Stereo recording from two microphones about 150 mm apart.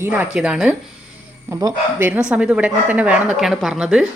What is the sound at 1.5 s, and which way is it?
Speech, 20° right (ahead or behind).